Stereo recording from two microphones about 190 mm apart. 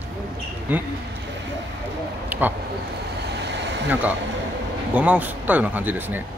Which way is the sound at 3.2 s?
60° right (ahead or behind).